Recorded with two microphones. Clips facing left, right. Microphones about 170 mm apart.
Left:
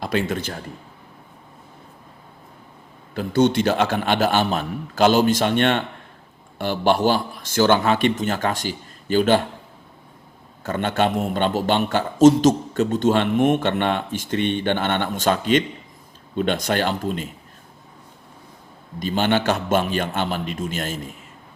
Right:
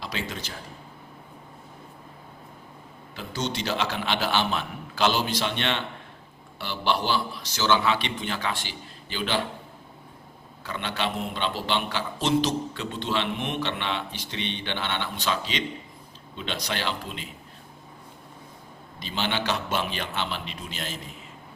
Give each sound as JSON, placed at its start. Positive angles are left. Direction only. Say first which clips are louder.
{"t": 0.0, "sound": "speech", "louder": "left 10 dB", "side_deg": 50}
{"t": 3.2, "sound": "a man's voice", "louder": "left 13 dB", "side_deg": 55}
{"t": 10.6, "sound": "a man's voice", "louder": "left 9 dB", "side_deg": 50}
{"t": 18.9, "sound": "a man's voice", "louder": "left 9 dB", "side_deg": 50}